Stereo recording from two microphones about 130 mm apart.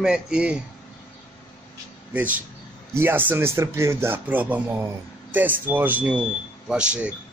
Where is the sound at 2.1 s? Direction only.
10° right (ahead or behind).